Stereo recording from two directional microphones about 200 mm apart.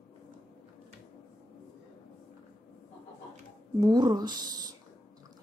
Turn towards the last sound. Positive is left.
turn(degrees=-20)  # may be behind; listen again after turning